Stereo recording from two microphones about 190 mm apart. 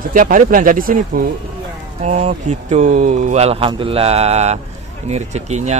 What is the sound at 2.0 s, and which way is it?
A man's voice, 35° right (ahead or behind).